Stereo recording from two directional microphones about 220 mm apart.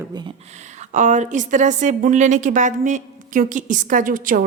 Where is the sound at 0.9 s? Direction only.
35° right (ahead or behind).